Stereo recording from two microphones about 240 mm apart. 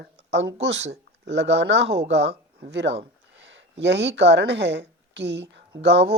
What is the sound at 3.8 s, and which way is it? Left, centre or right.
Speech, right.